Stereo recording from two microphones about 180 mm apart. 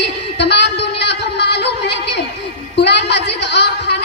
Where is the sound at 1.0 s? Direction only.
70° left (ahead or behind).